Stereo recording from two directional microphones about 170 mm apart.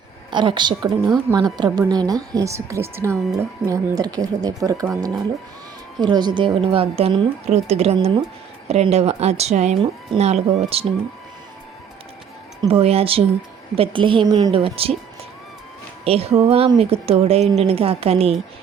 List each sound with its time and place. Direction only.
0.3 s speech: 25° right (ahead or behind)
6.0 s a woman's voice: 25° right (ahead or behind)
12.6 s a woman's voice: 35° right (ahead or behind)
16.0 s a woman's voice: 35° right (ahead or behind)